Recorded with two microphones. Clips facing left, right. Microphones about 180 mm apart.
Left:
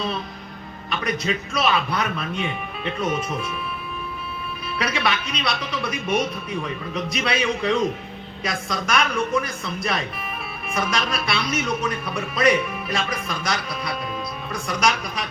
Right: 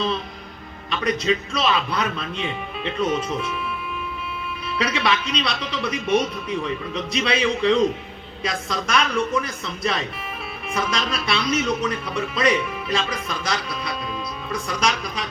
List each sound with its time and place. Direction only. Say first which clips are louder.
0.9 s a man's voice: right 3 dB; 30° right (ahead or behind)
4.8 s a man's voice: right 2 dB; 30° right (ahead or behind)
14.8 s a man's voice: left 3 dB; 30° right (ahead or behind)